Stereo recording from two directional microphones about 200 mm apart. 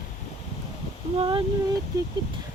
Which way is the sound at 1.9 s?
20° right (ahead or behind).